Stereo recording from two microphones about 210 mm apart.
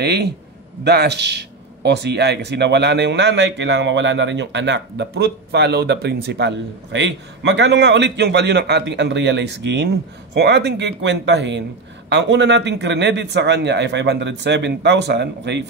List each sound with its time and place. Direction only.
0.0 s a man's voice: 50° right (ahead or behind)